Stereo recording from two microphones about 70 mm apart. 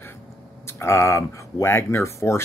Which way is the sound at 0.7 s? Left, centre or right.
Left.